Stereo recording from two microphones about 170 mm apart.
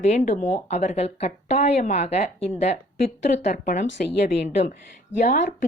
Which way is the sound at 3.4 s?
45° left (ahead or behind).